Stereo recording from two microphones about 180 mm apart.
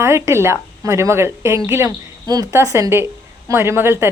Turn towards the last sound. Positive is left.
turn(degrees=-15)  # may be behind; listen again after turning